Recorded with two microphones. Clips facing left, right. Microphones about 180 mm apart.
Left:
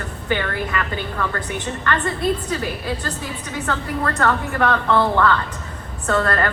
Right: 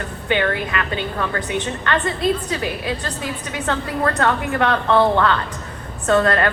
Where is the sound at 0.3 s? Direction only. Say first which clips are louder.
Right 3 dB; 20° right (ahead or behind).